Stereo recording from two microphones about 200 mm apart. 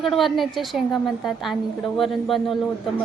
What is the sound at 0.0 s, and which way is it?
A woman's voice, centre (ahead or behind).